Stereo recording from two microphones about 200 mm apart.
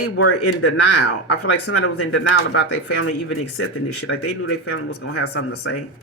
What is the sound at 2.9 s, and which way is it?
Speech, 90° left.